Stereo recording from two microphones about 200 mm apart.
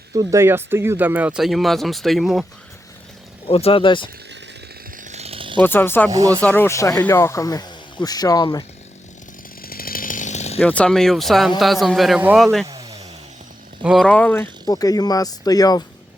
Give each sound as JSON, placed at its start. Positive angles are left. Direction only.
{"t": 0.1, "sound": "speech", "side_deg": -15}
{"t": 3.4, "sound": "speech", "side_deg": 30}
{"t": 4.9, "sound": "a sound", "side_deg": -35}
{"t": 5.6, "sound": "speech", "side_deg": 10}
{"t": 6.1, "sound": "speech", "side_deg": -15}
{"t": 6.4, "sound": "speech", "side_deg": 10}
{"t": 9.6, "sound": "chainsaw", "side_deg": 45}
{"t": 10.6, "sound": "speech", "side_deg": 5}
{"t": 12.6, "sound": "a sound", "side_deg": -20}
{"t": 13.8, "sound": "speech", "side_deg": 0}
{"t": 14.7, "sound": "speech", "side_deg": 20}